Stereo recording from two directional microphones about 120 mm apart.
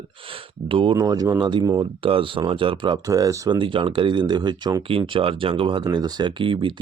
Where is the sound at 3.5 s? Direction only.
45° right (ahead or behind).